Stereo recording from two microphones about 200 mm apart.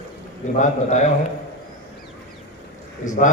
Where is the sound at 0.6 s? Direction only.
35° left (ahead or behind).